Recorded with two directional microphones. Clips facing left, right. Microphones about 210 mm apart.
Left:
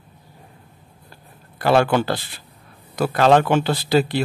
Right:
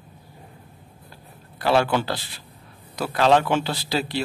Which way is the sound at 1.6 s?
50° left (ahead or behind).